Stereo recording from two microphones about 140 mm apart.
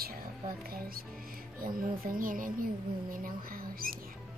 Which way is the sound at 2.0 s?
80° right.